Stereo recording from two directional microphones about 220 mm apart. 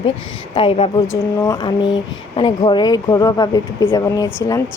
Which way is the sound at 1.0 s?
15° left (ahead or behind).